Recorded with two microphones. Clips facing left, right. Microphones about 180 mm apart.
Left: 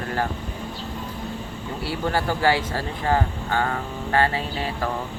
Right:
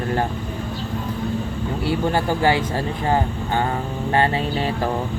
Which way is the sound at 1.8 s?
20° right (ahead or behind).